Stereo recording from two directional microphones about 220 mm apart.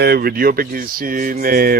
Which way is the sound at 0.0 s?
45° right (ahead or behind).